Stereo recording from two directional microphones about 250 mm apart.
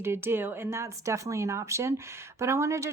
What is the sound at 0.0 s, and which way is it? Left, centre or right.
Speech, centre.